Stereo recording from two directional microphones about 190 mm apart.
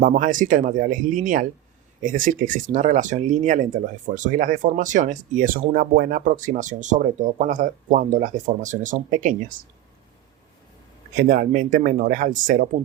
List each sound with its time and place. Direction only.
0.0 s speech: 45° right (ahead or behind)
11.2 s speech: 45° right (ahead or behind)